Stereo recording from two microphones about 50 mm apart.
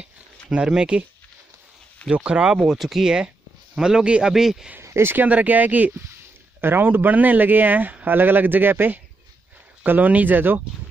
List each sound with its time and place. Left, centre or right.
0.0 s a sound: centre
2.1 s speech: centre
5.0 s speech: right
6.6 s speech: right